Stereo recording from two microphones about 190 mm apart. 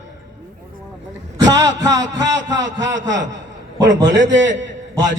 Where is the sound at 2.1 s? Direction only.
70° right (ahead or behind).